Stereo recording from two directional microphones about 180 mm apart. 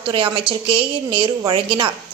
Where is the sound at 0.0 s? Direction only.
30° right (ahead or behind).